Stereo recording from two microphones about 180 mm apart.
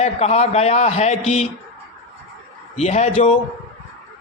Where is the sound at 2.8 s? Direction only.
40° left (ahead or behind).